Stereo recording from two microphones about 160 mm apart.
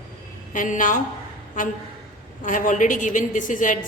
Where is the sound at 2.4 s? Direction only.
55° left (ahead or behind).